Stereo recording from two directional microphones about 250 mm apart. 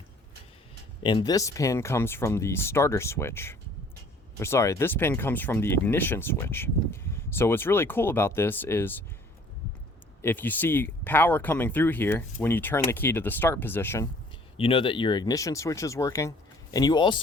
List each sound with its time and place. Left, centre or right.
1.0 s speech: centre
10.2 s speech: centre
14.5 s speech: left